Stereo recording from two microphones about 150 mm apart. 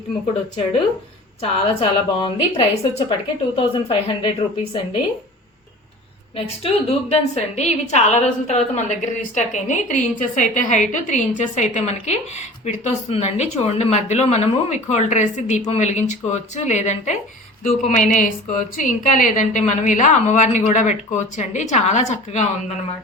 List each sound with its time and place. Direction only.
1.4 s a woman's voice: 40° left (ahead or behind)
7.1 s a woman's voice: 50° left (ahead or behind)